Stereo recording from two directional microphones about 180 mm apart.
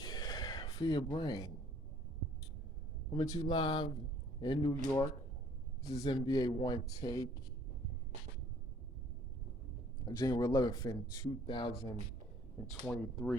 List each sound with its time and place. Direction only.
0.0 s a sound: 20° left (ahead or behind)
3.1 s speech: 25° left (ahead or behind)
5.9 s speech: 30° left (ahead or behind)
10.1 s speech: 20° left (ahead or behind)
12.8 s speech: 5° left (ahead or behind)